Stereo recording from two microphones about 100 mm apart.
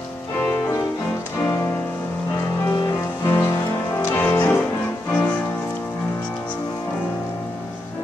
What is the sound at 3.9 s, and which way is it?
Music, 20° left (ahead or behind).